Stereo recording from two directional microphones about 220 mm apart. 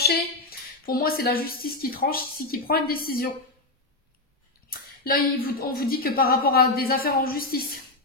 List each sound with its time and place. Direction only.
0.0 s a woman's voice: 45° left (ahead or behind)
4.6 s speech: 40° left (ahead or behind)